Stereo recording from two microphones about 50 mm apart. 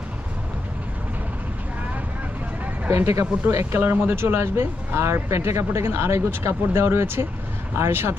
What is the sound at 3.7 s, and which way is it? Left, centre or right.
Speech, right.